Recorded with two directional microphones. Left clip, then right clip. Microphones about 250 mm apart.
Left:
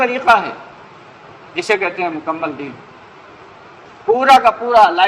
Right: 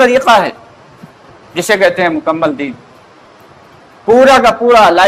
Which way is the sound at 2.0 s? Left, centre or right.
Right.